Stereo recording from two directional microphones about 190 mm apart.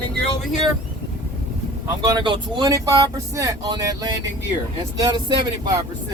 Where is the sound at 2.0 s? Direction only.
25° right (ahead or behind).